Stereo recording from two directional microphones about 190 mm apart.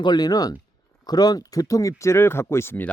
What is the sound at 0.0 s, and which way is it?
Speech, 20° left (ahead or behind).